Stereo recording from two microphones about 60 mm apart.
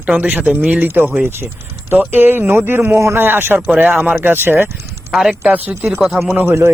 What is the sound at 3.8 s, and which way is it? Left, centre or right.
Speech, right.